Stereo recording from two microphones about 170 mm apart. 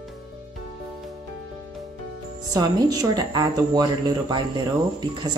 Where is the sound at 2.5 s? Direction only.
25° right (ahead or behind).